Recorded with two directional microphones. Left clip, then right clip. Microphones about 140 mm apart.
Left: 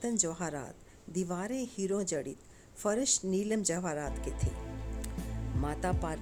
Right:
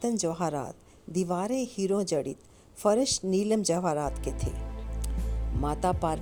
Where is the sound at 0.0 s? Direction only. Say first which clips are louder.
Right 6 dB; 30° right (ahead or behind).